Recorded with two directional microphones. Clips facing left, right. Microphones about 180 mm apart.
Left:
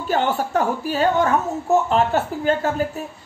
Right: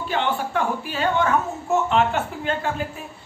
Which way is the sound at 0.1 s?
40° left (ahead or behind).